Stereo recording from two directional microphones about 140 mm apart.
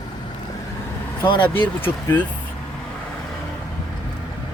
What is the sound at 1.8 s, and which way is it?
Speech, 15° left (ahead or behind).